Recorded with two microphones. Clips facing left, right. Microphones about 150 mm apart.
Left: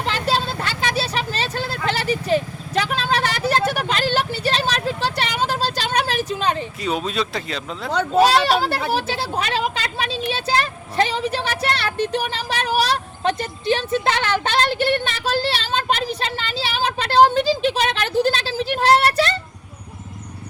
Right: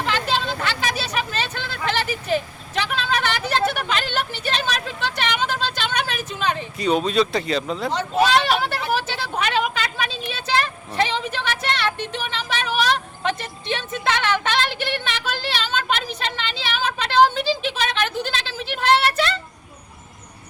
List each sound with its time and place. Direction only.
0.0 s vehicle: 35° left (ahead or behind)
6.7 s speech: centre (ahead or behind)
8.1 s a sound: 35° left (ahead or behind)